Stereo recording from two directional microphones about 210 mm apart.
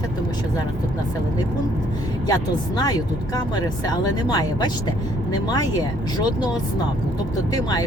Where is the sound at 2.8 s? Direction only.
20° left (ahead or behind).